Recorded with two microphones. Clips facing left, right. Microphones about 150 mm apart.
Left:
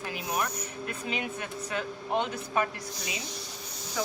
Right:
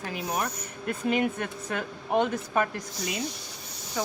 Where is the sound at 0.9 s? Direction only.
50° right (ahead or behind).